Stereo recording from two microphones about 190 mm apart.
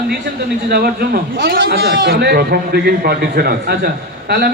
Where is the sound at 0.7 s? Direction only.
55° right (ahead or behind).